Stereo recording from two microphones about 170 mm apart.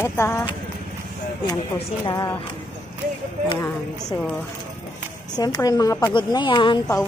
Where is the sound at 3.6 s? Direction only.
20° left (ahead or behind).